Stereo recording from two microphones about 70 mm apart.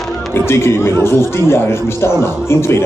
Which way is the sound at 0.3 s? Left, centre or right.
Left.